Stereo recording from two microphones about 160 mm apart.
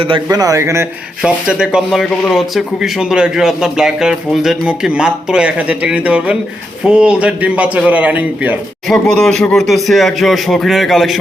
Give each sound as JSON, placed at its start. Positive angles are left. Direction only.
{"t": 0.0, "sound": "a man's voice", "side_deg": -30}
{"t": 1.2, "sound": "a man's voice", "side_deg": -5}
{"t": 8.9, "sound": "speech", "side_deg": 5}